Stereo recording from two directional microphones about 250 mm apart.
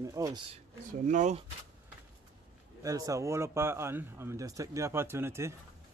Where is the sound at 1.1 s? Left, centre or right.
Right.